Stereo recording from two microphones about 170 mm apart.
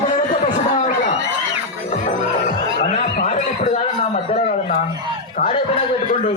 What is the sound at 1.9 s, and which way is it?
Music, 45° left (ahead or behind).